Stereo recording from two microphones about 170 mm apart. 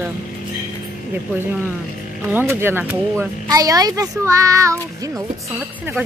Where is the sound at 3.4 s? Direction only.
20° right (ahead or behind).